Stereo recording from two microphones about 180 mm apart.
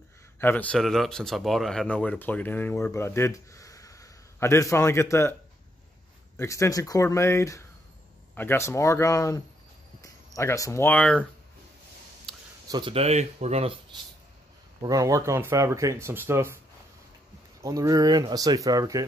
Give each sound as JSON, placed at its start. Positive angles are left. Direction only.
{"t": 0.4, "sound": "speech", "side_deg": 10}
{"t": 6.3, "sound": "speech", "side_deg": 15}
{"t": 12.6, "sound": "speech", "side_deg": -25}
{"t": 14.8, "sound": "speech", "side_deg": -20}
{"t": 17.6, "sound": "speech", "side_deg": -20}